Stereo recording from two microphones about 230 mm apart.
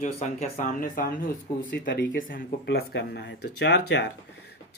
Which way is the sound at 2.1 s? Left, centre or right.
Left.